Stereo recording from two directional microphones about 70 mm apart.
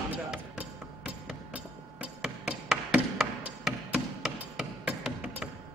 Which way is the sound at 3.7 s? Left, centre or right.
Centre.